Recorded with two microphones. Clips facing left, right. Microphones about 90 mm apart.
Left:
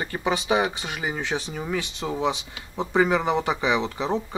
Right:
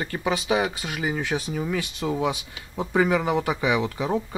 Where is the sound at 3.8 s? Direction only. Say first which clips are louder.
Right 1 dB; 20° left (ahead or behind).